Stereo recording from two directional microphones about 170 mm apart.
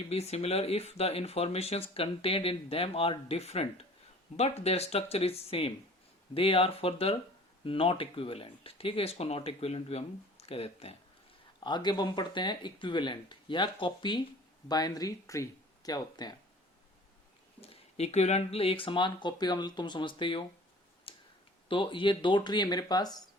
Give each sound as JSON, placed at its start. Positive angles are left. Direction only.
{"t": 0.1, "sound": "speech", "side_deg": 40}
{"t": 11.6, "sound": "speech", "side_deg": 25}
{"t": 17.6, "sound": "speech", "side_deg": 40}
{"t": 21.1, "sound": "a sound", "side_deg": 30}
{"t": 21.7, "sound": "speech", "side_deg": 30}